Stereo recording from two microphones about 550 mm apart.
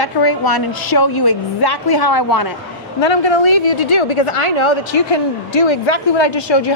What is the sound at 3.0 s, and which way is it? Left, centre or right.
A woman's voice, left.